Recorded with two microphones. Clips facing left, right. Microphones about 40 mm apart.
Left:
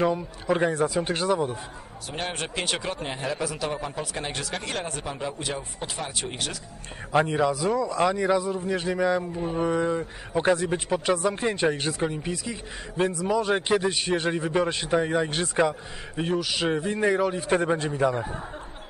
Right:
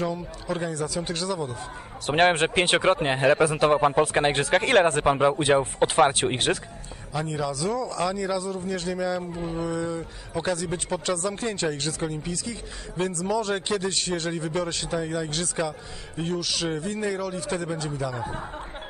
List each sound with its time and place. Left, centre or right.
0.0 s speech: left
2.0 s a man's voice: right
7.2 s speech: left